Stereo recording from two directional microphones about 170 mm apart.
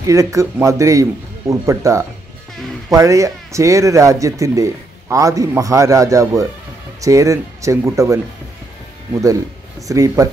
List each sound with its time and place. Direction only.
0.0 s speech: 20° right (ahead or behind)
9.8 s speech: 20° right (ahead or behind)